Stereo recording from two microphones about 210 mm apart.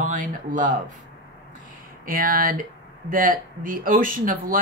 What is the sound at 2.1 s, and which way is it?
Speech, 40° right (ahead or behind).